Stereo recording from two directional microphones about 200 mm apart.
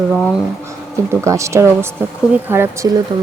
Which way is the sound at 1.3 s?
15° right (ahead or behind).